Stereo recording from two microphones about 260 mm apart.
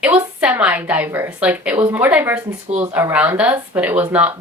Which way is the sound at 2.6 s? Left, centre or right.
Right.